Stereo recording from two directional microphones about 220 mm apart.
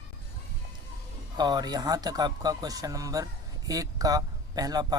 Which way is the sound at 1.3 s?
20° right (ahead or behind).